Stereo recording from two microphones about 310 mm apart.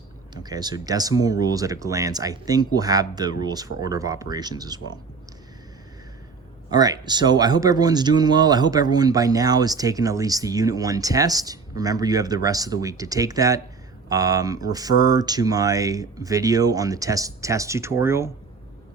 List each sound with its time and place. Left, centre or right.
0.4 s speech: centre
6.7 s speech: centre